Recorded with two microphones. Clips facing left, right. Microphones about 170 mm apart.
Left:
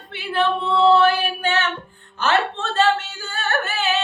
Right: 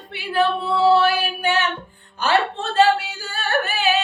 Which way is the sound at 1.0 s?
10° right (ahead or behind).